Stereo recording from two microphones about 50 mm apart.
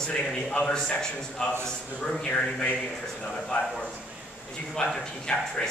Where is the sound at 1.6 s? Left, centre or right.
Centre.